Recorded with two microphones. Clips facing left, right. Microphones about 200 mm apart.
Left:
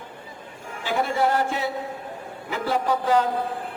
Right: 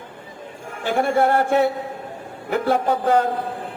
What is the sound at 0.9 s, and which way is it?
A man's voice, 55° right (ahead or behind).